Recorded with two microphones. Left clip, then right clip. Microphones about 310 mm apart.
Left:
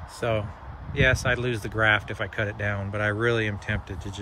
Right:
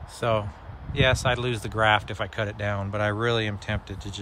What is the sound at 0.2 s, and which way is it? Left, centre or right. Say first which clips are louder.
Speech: right 2 dB; centre.